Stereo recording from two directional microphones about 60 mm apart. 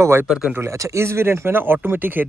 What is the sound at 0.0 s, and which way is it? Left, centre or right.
Speech, right.